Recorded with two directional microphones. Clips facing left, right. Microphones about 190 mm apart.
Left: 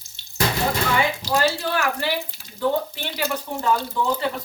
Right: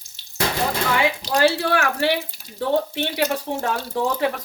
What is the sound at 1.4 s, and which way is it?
Speech, 70° right (ahead or behind).